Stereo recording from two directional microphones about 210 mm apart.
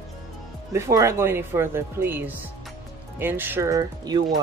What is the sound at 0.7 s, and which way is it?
Speech, 15° right (ahead or behind).